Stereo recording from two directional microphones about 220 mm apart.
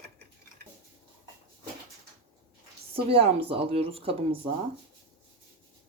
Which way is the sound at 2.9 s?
25° right (ahead or behind).